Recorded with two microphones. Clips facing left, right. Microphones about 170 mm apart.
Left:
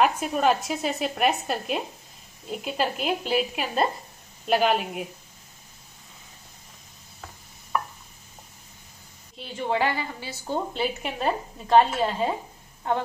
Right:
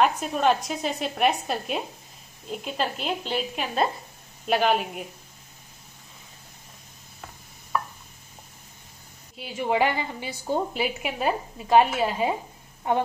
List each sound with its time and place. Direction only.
0.0 s a woman's voice: 5° left (ahead or behind)
9.4 s a woman's voice: 10° right (ahead or behind)